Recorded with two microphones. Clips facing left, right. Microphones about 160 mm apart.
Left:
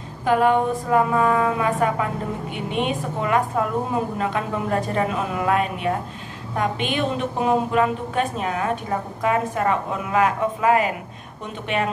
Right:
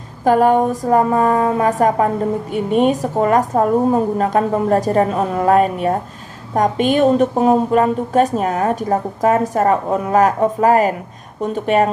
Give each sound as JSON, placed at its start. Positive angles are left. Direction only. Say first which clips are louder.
{"t": 0.2, "sound": "a woman's voice", "louder": "right 5 dB", "side_deg": -40}